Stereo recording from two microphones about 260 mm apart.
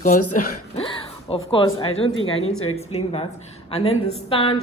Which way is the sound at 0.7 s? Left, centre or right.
Left.